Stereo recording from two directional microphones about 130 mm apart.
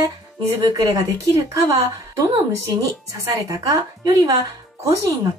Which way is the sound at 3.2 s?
25° right (ahead or behind).